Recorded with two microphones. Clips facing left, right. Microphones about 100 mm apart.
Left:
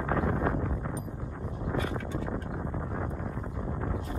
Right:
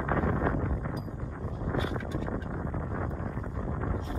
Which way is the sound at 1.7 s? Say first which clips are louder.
Even; 15° right (ahead or behind).